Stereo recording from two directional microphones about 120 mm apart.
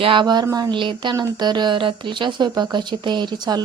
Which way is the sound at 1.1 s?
30° right (ahead or behind).